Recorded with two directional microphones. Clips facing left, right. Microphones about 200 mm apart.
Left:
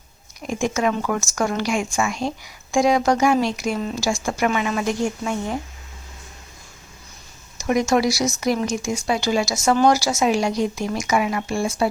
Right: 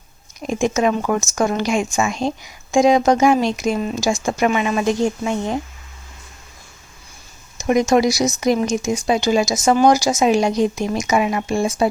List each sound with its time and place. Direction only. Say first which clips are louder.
0.3 s speech: right 4 dB; 20° right (ahead or behind)
7.6 s speech: right 4 dB; 20° right (ahead or behind)